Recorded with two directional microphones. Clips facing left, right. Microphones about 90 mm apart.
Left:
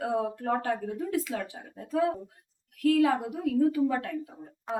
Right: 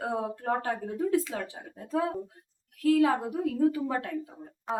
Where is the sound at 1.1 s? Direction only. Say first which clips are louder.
Right 2 dB; 30° right (ahead or behind).